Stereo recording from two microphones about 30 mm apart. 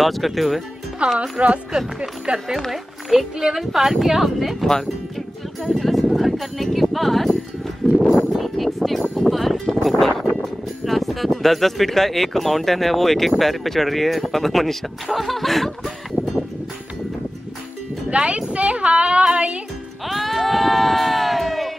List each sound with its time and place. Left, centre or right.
0.0 s speech: centre
1.0 s speech: right
1.4 s speech: right
2.0 s speech: right
2.7 s speech: centre
5.6 s speech: centre
7.8 s a sound: centre
8.4 s speech: centre
9.1 s music: centre
11.4 s speech: centre
16.2 s a sound: right
18.1 s speech: right
20.1 s speech: centre